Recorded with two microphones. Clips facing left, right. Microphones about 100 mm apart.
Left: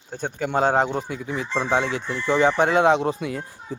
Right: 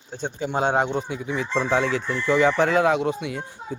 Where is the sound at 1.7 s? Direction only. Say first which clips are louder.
Even; 25° left (ahead or behind).